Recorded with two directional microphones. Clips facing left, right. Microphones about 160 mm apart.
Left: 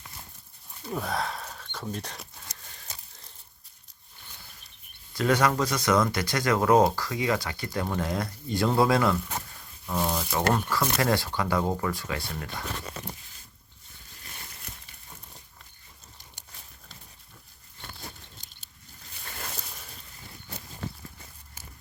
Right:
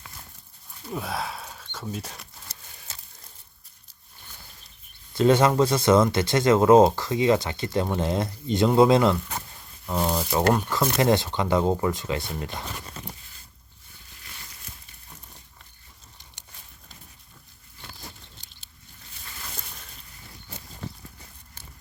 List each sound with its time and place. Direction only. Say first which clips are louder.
0.9 s speech: even; 5° right (ahead or behind)
2.5 s a sound: even; 15° left (ahead or behind)
5.1 s speech: right 5 dB; 25° right (ahead or behind)